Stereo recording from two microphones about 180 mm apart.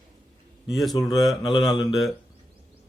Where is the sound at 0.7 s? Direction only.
Centre (ahead or behind).